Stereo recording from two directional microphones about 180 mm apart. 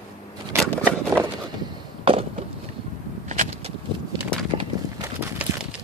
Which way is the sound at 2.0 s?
30° right (ahead or behind).